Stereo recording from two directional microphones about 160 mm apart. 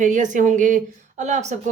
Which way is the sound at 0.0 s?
50° right (ahead or behind).